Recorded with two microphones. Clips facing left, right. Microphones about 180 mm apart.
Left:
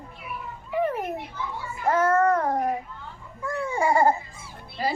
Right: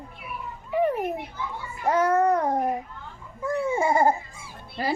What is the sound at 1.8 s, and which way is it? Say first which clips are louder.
A child's voice: even; 15° right (ahead or behind).